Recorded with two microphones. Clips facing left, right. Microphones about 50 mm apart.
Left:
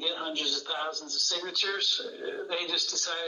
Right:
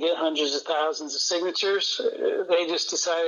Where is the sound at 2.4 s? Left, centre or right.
Right.